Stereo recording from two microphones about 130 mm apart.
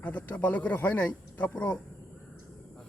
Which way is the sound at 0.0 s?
10° left (ahead or behind).